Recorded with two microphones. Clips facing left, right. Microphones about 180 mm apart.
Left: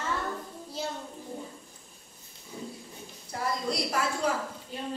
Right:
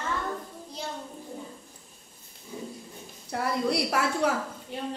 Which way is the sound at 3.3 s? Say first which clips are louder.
Right 4 dB; 65° right (ahead or behind).